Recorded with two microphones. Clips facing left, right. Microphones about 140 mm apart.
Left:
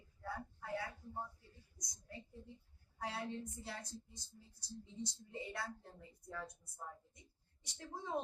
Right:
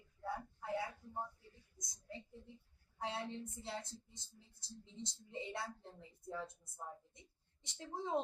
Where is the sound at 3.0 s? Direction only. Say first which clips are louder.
Even; 25° right (ahead or behind).